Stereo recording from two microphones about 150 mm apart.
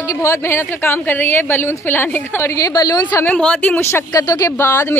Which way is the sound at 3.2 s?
5° left (ahead or behind).